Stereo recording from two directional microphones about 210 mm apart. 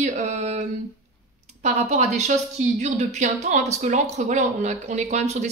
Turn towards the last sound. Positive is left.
turn(degrees=-35)  # may be behind; listen again after turning